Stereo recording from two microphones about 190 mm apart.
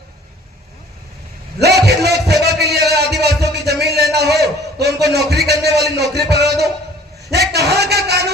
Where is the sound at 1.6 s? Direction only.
60° right (ahead or behind).